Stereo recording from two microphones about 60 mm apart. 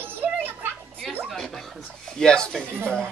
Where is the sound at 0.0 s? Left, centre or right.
Right.